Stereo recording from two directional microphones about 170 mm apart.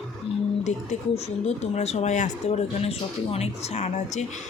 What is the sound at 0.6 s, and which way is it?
Speech, 40° left (ahead or behind).